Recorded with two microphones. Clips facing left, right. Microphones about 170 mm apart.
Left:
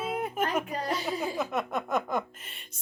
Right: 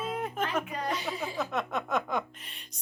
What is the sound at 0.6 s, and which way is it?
Speech, 35° left (ahead or behind).